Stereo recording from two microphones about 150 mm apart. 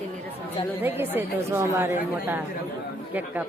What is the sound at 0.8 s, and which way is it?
A woman's voice, 15° right (ahead or behind).